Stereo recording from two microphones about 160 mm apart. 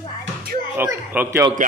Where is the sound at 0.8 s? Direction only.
15° right (ahead or behind).